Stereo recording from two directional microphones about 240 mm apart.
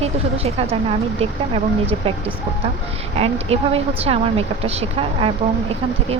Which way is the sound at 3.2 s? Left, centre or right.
Right.